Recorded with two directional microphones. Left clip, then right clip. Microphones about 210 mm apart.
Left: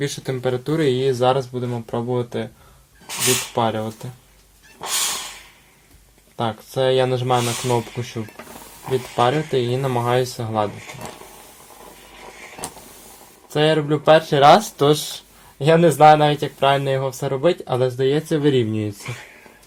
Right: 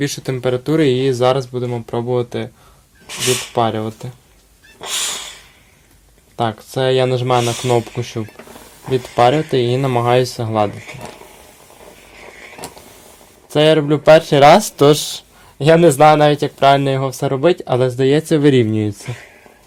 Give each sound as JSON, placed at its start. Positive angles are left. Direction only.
{"t": 0.0, "sound": "speech", "side_deg": -50}
{"t": 3.1, "sound": "speech", "side_deg": -10}
{"t": 3.5, "sound": "speech", "side_deg": -50}
{"t": 4.8, "sound": "a sound", "side_deg": -10}
{"t": 6.3, "sound": "speech", "side_deg": -45}
{"t": 9.1, "sound": "speech", "side_deg": -50}
{"t": 13.5, "sound": "speech", "side_deg": -50}
{"t": 19.0, "sound": "speech", "side_deg": 0}